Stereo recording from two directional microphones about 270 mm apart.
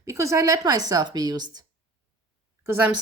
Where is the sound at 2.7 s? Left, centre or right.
Centre.